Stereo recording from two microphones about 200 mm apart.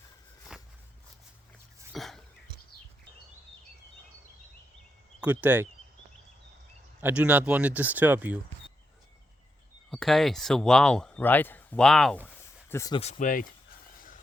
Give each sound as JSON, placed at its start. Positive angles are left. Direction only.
{"t": 0.5, "sound": "walk", "side_deg": -5}
{"t": 1.9, "sound": "throat clearing", "side_deg": 0}
{"t": 5.2, "sound": "speech", "side_deg": -10}
{"t": 7.0, "sound": "speech", "side_deg": -5}
{"t": 9.9, "sound": "speech", "side_deg": 0}
{"t": 12.7, "sound": "speech", "side_deg": 15}
{"t": 13.0, "sound": "speech", "side_deg": 35}